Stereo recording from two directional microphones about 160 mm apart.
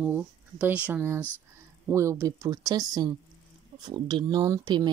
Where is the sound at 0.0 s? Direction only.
10° right (ahead or behind).